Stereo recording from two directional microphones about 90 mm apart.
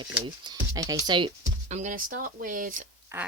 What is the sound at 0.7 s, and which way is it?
Speech, 40° right (ahead or behind).